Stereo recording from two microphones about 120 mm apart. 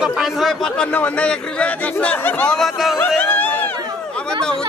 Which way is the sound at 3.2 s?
15° left (ahead or behind).